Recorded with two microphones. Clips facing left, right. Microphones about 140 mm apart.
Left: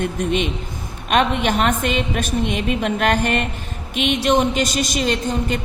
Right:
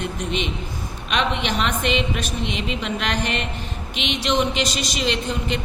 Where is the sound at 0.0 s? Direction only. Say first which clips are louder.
Left 5 dB; 50° left (ahead or behind).